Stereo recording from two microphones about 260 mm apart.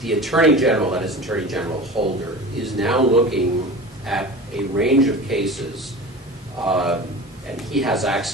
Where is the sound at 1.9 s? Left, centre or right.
Centre.